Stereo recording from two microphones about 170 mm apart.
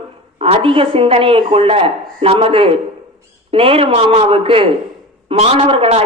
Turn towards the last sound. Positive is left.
turn(degrees=-35)  # may be behind; listen again after turning